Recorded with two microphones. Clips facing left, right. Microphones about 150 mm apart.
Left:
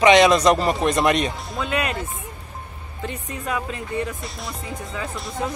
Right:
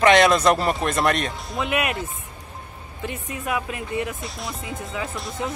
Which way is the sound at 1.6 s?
15° right (ahead or behind).